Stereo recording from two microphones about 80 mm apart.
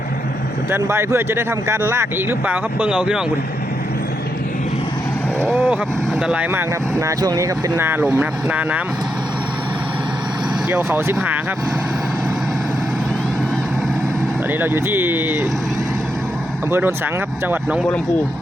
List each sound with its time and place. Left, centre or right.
0.7 s speech: right; by 3.2 s centre
5.5 s speech: right
7.0 s speech: right
7.8 s speech: right
14.6 s speech: right
16.7 s speech: right